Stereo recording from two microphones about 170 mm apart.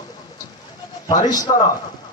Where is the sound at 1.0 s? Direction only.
25° left (ahead or behind).